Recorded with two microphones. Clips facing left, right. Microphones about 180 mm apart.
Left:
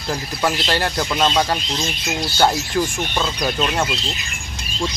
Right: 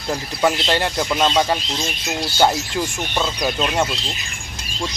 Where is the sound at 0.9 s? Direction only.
10° right (ahead or behind).